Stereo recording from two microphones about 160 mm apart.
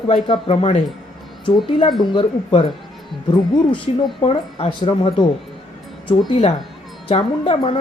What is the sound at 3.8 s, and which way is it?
Speech, 35° left (ahead or behind).